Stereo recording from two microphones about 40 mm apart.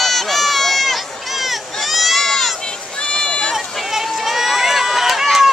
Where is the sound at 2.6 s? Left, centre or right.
Left.